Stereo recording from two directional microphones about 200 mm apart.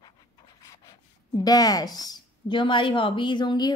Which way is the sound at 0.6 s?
15° left (ahead or behind).